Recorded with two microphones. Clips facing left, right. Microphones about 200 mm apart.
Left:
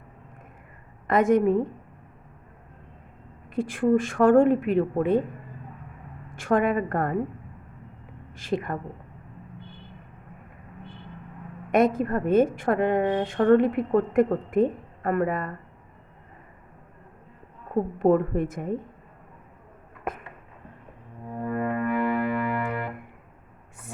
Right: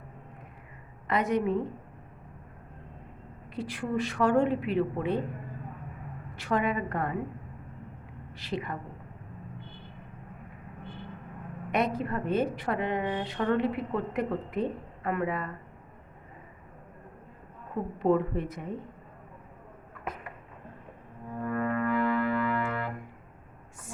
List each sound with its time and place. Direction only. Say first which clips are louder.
1.0 s a woman's voice: left 7 dB; 50° left (ahead or behind)
3.5 s a woman's voice: left 10 dB; 50° left (ahead or behind)
6.3 s a woman's voice: left 6 dB; 50° left (ahead or behind)
8.3 s a woman's voice: left 6 dB; 50° left (ahead or behind)
11.7 s a woman's voice: left 7 dB; 50° left (ahead or behind)
18.0 s a woman's voice: left 4 dB; 50° left (ahead or behind)
20.1 s a sound: left 5 dB; 50° left (ahead or behind)
21.3 s music: left 2 dB; 25° left (ahead or behind)